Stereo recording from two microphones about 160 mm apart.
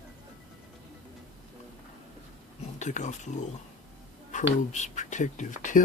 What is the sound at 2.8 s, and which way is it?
Speech, 50° left (ahead or behind).